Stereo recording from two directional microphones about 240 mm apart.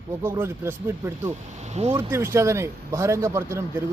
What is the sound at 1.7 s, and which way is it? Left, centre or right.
Speech, right.